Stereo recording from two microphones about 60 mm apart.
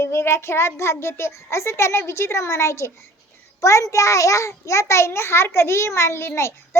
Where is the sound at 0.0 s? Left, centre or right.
Left.